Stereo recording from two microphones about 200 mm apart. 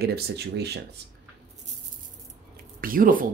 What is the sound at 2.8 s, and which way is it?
Speech, 45° right (ahead or behind).